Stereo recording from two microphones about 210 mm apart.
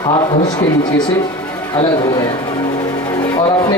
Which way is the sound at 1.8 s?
20° left (ahead or behind).